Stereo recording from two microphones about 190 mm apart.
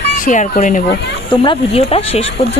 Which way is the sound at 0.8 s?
60° left (ahead or behind).